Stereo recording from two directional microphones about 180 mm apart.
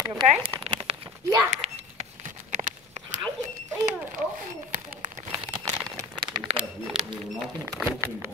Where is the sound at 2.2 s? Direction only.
45° right (ahead or behind).